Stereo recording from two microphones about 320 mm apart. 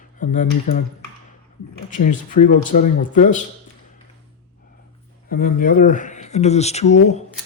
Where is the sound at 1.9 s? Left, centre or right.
Left.